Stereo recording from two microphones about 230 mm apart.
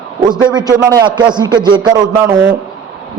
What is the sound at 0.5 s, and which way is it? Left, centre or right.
A man's voice, centre.